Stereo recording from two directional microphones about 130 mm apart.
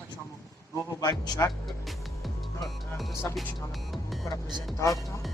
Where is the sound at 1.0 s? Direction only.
30° left (ahead or behind).